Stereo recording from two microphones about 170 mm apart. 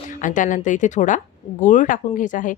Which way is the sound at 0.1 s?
50° left (ahead or behind).